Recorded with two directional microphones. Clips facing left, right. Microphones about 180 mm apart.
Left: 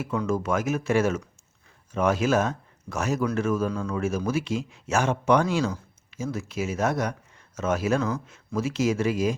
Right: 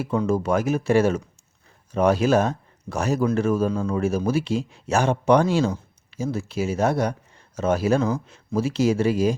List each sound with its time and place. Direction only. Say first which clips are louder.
0.0 s speech: right 4 dB; 30° right (ahead or behind)